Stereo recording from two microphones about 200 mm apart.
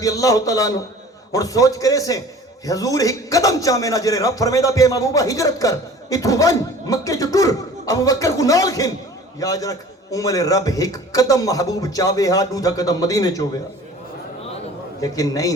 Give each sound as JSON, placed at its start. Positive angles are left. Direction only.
{"t": 0.0, "sound": "a man's voice", "side_deg": 15}
{"t": 15.0, "sound": "a man's voice", "side_deg": 15}